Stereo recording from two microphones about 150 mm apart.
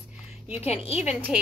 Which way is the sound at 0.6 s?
45° left (ahead or behind).